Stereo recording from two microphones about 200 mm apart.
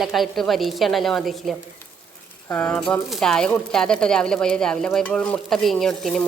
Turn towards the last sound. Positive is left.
turn(degrees=5)  # may be behind; listen again after turning